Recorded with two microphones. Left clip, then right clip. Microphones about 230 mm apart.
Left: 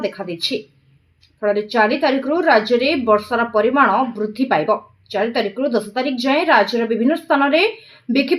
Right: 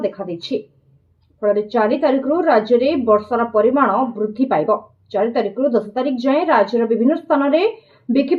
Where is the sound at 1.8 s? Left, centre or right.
Left.